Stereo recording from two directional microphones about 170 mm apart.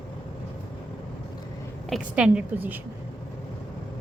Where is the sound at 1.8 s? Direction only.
5° right (ahead or behind).